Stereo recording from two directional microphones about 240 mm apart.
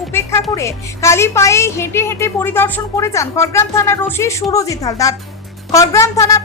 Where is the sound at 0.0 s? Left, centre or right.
Centre.